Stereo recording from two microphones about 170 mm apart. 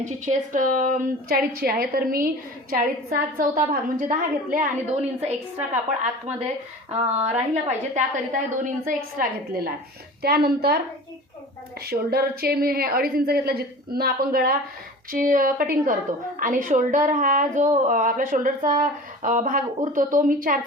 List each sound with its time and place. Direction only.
0.0 s a woman's voice: 45° right (ahead or behind); by 10.8 s 70° right (ahead or behind)
11.9 s a woman's voice: 65° right (ahead or behind); by 20.6 s 50° right (ahead or behind)